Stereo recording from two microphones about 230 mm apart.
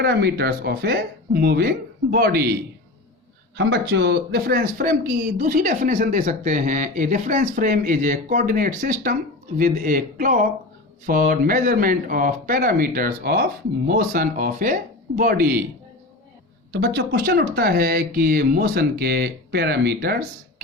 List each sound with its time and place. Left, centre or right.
0.0 s speech: right
3.6 s speech: right
16.8 s speech: right